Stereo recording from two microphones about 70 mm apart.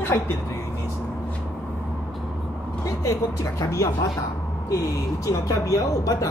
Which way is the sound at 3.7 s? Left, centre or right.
Left.